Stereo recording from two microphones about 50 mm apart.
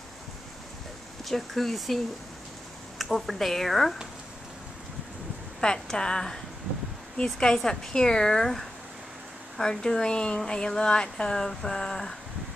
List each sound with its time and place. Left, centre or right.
1.2 s speech: centre
3.0 s speech: centre
5.6 s speech: centre